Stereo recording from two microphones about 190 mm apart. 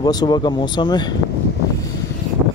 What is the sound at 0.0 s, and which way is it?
Speech, 20° left (ahead or behind).